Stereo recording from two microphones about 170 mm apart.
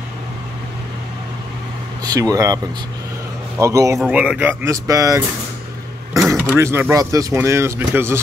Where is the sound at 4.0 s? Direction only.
5° right (ahead or behind).